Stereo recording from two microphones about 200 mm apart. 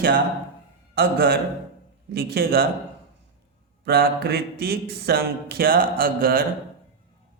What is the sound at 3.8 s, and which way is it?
Speech, 50° right (ahead or behind).